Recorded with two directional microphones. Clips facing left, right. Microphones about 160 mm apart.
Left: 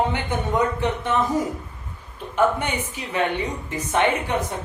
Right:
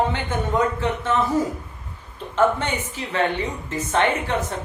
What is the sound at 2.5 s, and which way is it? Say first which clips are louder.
A woman's voice: even; 10° left (ahead or behind).